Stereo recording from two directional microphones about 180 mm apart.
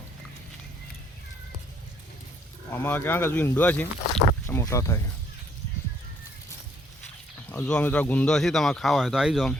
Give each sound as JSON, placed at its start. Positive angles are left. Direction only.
{"t": 2.6, "sound": "speech", "side_deg": 10}
{"t": 7.5, "sound": "speech", "side_deg": 5}